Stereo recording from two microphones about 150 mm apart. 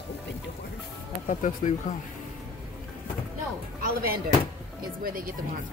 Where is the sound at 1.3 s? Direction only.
55° left (ahead or behind).